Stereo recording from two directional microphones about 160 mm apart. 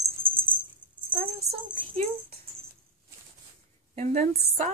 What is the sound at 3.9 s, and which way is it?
Speech, 45° right (ahead or behind).